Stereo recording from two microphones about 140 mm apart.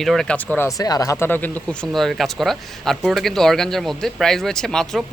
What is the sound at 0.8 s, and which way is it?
Speech, 25° left (ahead or behind).